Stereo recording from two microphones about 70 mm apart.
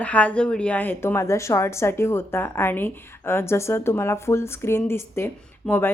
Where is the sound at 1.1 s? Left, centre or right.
Left.